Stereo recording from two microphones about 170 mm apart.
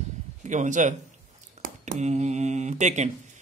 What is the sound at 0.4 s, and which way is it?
A man's voice, 45° right (ahead or behind).